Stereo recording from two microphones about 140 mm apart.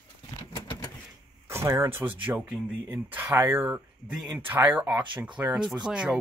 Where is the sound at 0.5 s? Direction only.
30° left (ahead or behind).